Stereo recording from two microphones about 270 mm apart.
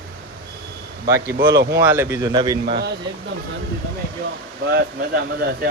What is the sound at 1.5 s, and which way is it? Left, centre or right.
Speech, right.